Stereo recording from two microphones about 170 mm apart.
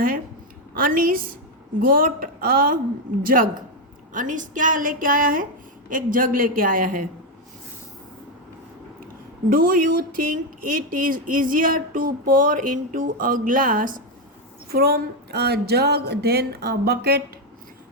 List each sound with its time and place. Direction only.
0.8 s a woman's voice: 55° right (ahead or behind)
9.5 s speech: 55° right (ahead or behind)
14.7 s speech: 65° right (ahead or behind)